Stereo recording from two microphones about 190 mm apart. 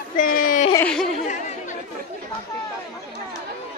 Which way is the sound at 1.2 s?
40° left (ahead or behind).